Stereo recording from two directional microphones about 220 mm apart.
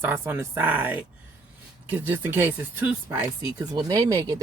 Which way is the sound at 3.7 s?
20° right (ahead or behind).